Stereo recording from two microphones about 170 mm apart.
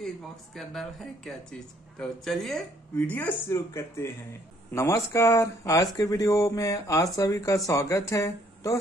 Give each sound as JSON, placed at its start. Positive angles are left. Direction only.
{"t": 0.6, "sound": "speech", "side_deg": 0}